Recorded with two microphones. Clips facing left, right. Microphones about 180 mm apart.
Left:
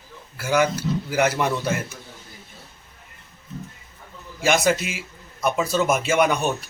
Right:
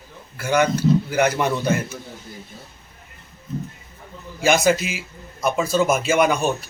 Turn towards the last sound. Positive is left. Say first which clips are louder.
# right 2 dB
turn(degrees=0)  # may be behind; listen again after turning